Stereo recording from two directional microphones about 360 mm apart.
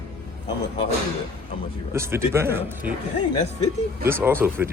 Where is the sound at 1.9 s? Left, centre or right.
Centre.